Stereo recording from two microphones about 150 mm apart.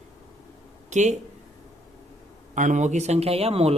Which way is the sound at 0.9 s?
50° right (ahead or behind).